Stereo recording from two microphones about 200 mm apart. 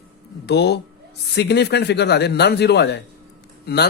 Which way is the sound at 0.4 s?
55° left (ahead or behind).